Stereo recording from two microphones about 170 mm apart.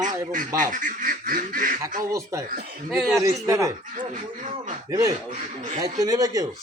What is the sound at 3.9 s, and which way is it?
Speech, 50° right (ahead or behind).